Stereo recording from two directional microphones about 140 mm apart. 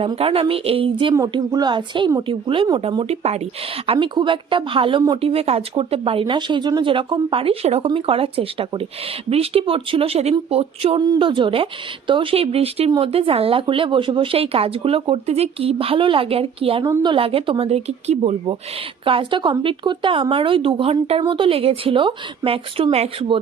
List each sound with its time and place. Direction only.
0.2 s speech: 40° right (ahead or behind)
1.1 s speech: 25° right (ahead or behind); by 3.4 s 45° right (ahead or behind)
3.8 s speech: 35° right (ahead or behind)
11.0 s speech: 35° right (ahead or behind)